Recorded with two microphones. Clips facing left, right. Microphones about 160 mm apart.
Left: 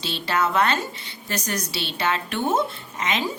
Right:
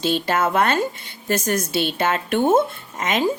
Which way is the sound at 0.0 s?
50° right (ahead or behind).